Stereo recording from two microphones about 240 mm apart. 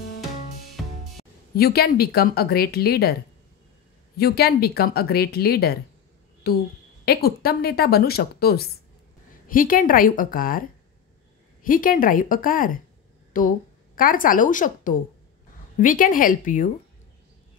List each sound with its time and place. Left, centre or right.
1.1 s speech: left
4.2 s speech: left
11.6 s a woman's voice: left